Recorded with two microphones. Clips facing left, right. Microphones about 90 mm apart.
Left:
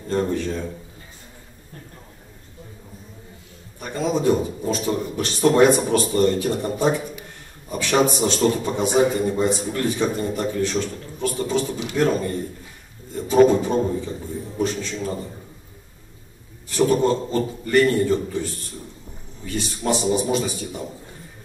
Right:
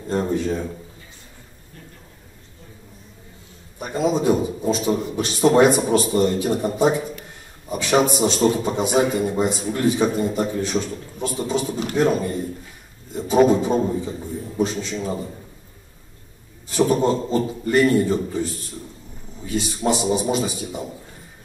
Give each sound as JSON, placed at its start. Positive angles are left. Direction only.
{"t": 0.1, "sound": "a man's voice", "side_deg": -15}
{"t": 3.8, "sound": "a man's voice", "side_deg": -15}
{"t": 16.6, "sound": "a man's voice", "side_deg": -20}